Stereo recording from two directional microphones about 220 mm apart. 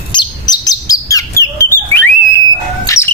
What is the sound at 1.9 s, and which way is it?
Whistle, 10° left (ahead or behind).